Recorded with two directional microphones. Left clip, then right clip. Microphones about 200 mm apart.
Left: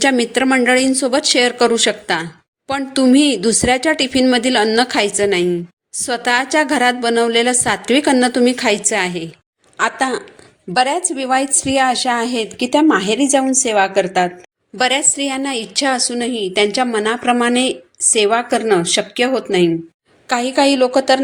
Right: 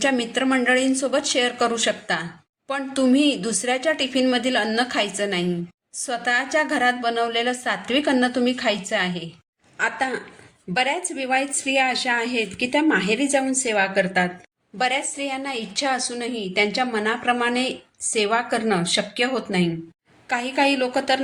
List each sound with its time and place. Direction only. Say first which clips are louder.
0.0 s a woman's voice: left 7 dB; 45° left (ahead or behind)